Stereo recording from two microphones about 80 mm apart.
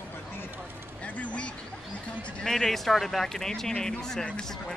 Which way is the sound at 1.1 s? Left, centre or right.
Centre.